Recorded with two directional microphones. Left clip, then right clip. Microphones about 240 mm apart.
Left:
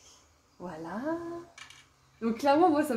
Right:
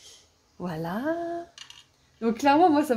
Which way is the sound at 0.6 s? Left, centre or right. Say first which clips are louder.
Right 6 dB; right.